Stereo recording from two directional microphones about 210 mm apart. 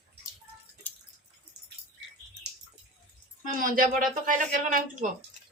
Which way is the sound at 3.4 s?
40° right (ahead or behind).